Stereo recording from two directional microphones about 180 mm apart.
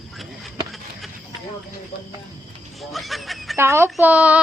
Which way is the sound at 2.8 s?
Centre (ahead or behind).